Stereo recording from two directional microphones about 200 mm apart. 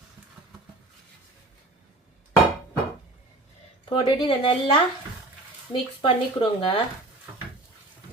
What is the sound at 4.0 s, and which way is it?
A woman's voice, 25° left (ahead or behind).